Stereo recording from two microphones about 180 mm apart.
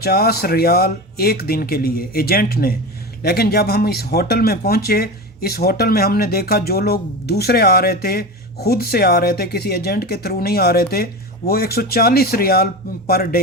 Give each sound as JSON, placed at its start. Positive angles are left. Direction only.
{"t": 0.0, "sound": "speech", "side_deg": 60}